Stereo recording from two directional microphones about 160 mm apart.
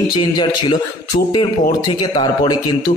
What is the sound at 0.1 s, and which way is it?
A man's voice, 25° left (ahead or behind).